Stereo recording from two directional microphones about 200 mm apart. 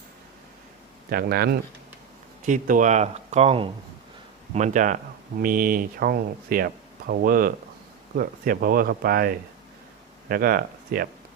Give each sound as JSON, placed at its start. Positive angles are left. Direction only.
{"t": 1.1, "sound": "speech", "side_deg": -50}
{"t": 2.5, "sound": "speech", "side_deg": -40}